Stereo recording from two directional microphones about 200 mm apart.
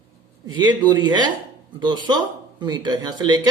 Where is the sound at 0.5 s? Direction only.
20° right (ahead or behind).